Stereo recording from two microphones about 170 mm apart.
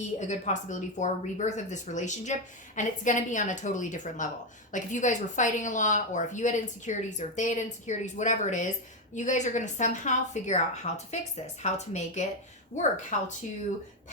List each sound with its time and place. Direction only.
0.2 s speech: 45° left (ahead or behind)